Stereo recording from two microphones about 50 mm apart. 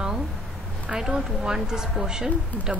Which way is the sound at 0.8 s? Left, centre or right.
Centre.